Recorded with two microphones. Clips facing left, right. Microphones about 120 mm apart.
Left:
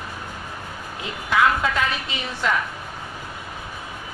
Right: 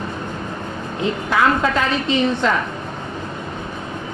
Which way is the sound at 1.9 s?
10° left (ahead or behind).